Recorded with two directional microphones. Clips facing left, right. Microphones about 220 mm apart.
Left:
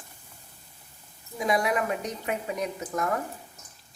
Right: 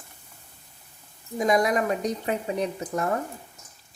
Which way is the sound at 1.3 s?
45° right (ahead or behind).